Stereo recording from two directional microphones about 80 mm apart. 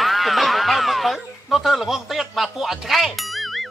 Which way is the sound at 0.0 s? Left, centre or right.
Centre.